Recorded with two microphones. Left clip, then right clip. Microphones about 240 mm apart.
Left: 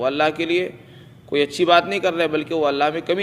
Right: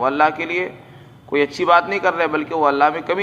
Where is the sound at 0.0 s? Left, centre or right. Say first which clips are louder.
Right 3 dB; left.